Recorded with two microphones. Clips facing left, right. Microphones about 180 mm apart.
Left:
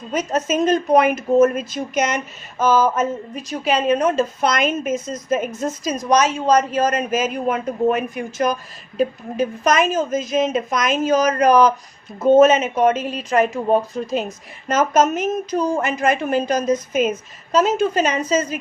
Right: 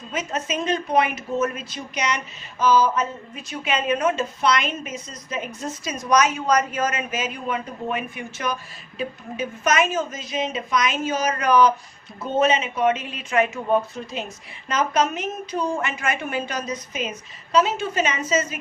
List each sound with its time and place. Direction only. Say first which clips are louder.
0.1 s speech: left 7 dB; 40° left (ahead or behind)
6.1 s a man's voice: left 3 dB; 30° left (ahead or behind)